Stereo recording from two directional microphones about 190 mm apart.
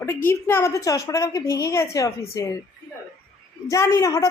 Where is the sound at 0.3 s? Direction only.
15° left (ahead or behind).